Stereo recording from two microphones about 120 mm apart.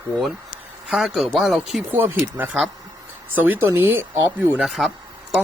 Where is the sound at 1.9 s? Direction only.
15° right (ahead or behind).